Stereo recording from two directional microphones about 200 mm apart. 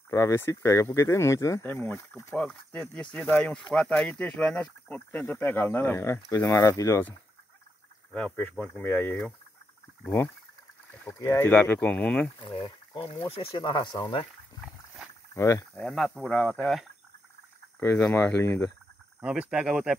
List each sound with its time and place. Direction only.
0.1 s speech: 15° left (ahead or behind)
12.4 s speech: 25° left (ahead or behind)
15.8 s speech: centre (ahead or behind)
19.2 s speech: 5° right (ahead or behind)